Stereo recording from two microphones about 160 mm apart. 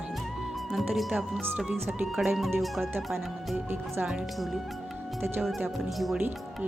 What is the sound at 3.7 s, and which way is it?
Speech, 15° right (ahead or behind).